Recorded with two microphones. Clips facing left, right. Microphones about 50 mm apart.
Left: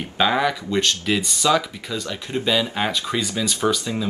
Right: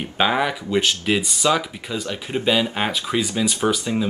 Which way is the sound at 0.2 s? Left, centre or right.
Centre.